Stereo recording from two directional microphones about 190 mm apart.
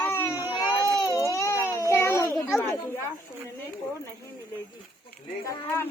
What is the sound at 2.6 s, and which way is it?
Speech, 15° left (ahead or behind).